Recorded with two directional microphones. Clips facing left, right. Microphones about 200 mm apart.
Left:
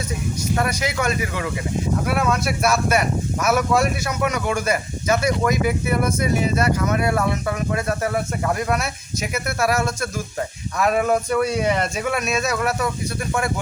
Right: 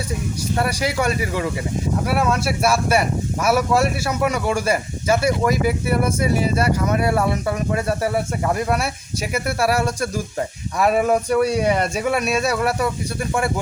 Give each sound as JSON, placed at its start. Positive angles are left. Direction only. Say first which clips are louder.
{"t": 0.6, "sound": "speech", "louder": "right 3 dB", "side_deg": -35}
{"t": 2.0, "sound": "speech", "louder": "right 3 dB", "side_deg": -5}
{"t": 5.2, "sound": "speech", "louder": "right 1 dB", "side_deg": -5}
{"t": 7.8, "sound": "speech", "louder": "right 2 dB", "side_deg": -35}
{"t": 9.7, "sound": "speech", "louder": "right 2 dB", "side_deg": -35}
{"t": 10.8, "sound": "speech", "louder": "right 2 dB", "side_deg": -10}
{"t": 12.5, "sound": "speech", "louder": "right 2 dB", "side_deg": -35}